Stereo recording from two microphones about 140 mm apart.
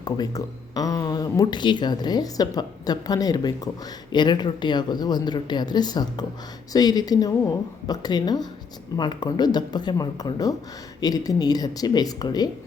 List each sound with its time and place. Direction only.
0.0 s speech: 30° left (ahead or behind)